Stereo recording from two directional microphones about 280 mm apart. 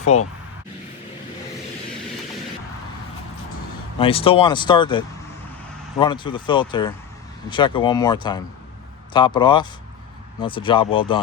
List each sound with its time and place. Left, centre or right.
0.1 s speech: left
3.9 s speech: centre